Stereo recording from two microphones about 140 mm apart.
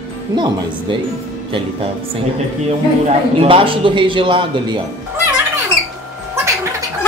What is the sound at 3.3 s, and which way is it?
A man's voice, 40° right (ahead or behind).